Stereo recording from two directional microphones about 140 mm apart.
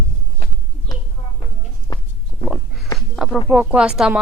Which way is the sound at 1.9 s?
30° left (ahead or behind).